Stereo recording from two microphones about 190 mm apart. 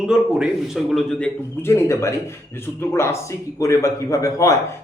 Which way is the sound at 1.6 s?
15° left (ahead or behind).